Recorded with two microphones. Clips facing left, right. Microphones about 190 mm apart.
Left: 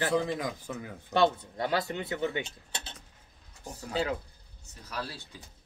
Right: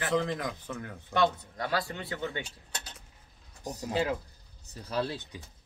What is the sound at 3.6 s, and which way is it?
Speech, 40° right (ahead or behind).